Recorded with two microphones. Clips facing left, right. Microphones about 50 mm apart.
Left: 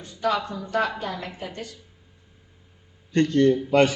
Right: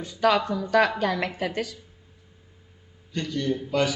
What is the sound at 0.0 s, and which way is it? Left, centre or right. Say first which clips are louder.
Speech: right 3 dB; right.